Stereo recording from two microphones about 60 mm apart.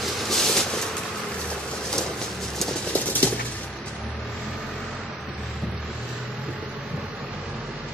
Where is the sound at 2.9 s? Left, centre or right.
Left.